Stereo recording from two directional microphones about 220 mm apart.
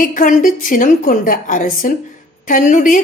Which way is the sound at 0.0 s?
40° left (ahead or behind).